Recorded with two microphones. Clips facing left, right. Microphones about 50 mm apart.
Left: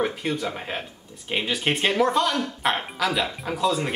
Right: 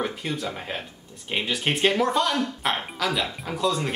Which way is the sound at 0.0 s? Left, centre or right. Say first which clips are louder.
Left 3 dB; centre.